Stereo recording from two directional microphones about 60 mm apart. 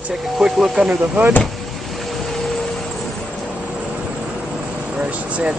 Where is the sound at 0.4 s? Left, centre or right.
Centre.